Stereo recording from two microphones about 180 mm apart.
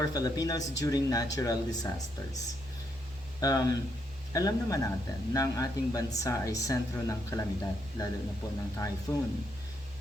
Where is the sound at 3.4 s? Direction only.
20° left (ahead or behind).